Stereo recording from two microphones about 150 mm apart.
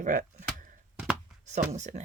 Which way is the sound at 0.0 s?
60° right (ahead or behind).